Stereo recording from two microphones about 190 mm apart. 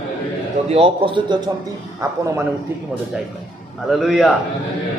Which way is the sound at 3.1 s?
5° right (ahead or behind).